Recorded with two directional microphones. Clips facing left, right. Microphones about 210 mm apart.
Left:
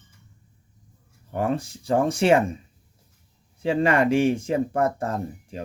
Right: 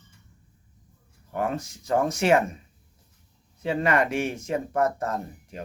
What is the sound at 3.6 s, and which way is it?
Speech, 30° left (ahead or behind).